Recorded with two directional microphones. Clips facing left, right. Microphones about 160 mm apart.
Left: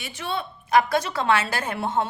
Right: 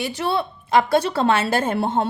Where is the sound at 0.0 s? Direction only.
35° right (ahead or behind).